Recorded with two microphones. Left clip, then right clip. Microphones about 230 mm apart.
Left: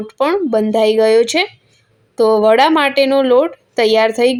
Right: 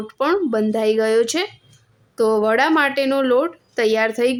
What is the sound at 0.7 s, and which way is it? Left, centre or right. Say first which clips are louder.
Speech: left 7 dB; centre.